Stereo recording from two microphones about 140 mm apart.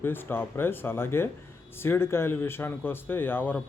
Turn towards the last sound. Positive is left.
turn(degrees=15)  # may be behind; listen again after turning